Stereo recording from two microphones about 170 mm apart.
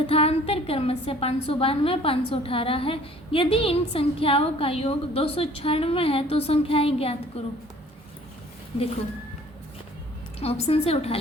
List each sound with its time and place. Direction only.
0.1 s a woman's voice: 35° left (ahead or behind)
10.4 s a woman's voice: 35° left (ahead or behind)